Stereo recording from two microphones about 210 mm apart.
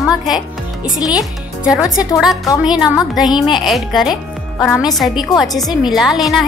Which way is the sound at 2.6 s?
5° right (ahead or behind).